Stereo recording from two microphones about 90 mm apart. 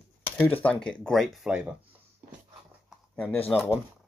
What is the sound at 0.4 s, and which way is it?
Speech, 20° left (ahead or behind).